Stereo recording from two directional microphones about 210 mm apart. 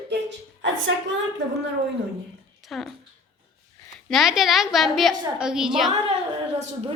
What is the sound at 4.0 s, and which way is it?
A woman's voice, centre (ahead or behind).